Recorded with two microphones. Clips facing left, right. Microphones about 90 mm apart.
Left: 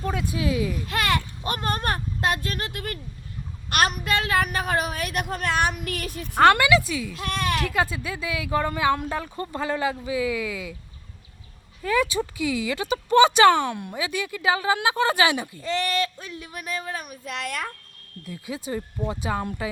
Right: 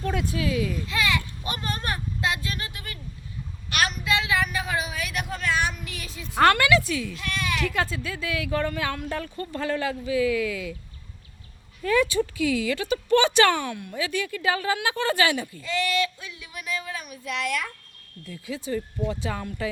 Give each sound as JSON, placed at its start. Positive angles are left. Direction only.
{"t": 0.0, "sound": "a sound", "side_deg": 0}
{"t": 0.3, "sound": "speech", "side_deg": 20}
{"t": 0.9, "sound": "a woman's voice", "side_deg": 55}
{"t": 6.3, "sound": "speech", "side_deg": 5}
{"t": 7.1, "sound": "a woman's voice", "side_deg": 45}
{"t": 7.7, "sound": "speech", "side_deg": 10}
{"t": 11.8, "sound": "speech", "side_deg": 5}
{"t": 13.7, "sound": "speech", "side_deg": 20}
{"t": 15.6, "sound": "speech", "side_deg": 40}
{"t": 18.3, "sound": "speech", "side_deg": 15}
{"t": 19.0, "sound": "speech", "side_deg": 35}
{"t": 19.6, "sound": "speech", "side_deg": 15}